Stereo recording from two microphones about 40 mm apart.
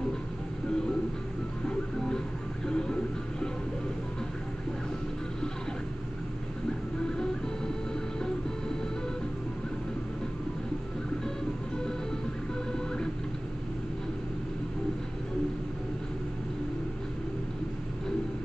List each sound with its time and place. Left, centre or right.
1.7 s music: centre
7.0 s music: centre
12.7 s printer: centre